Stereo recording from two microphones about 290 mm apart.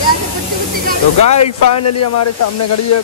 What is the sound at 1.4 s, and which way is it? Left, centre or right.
Speech, left.